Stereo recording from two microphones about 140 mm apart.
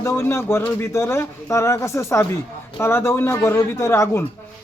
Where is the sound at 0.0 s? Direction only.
20° left (ahead or behind).